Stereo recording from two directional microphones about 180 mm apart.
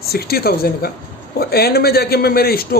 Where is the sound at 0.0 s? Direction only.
60° left (ahead or behind).